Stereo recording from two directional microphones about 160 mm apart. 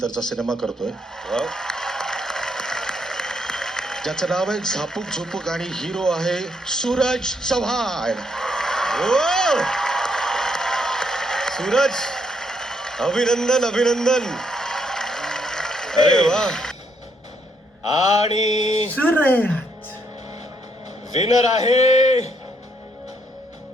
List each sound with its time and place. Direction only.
0.2 s a sound: 5° left (ahead or behind)
18.2 s a man's voice: 45° left (ahead or behind)
18.9 s speech: 10° left (ahead or behind)
21.2 s a man's voice: 45° left (ahead or behind)